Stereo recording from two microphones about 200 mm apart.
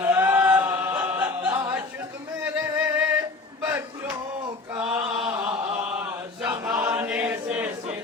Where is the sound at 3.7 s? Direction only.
10° right (ahead or behind).